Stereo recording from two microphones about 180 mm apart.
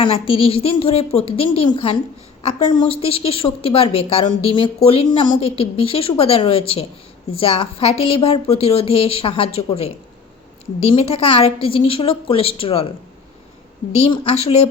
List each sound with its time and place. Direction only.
0.0 s a woman's voice: 30° left (ahead or behind)
13.9 s a woman's voice: 35° left (ahead or behind)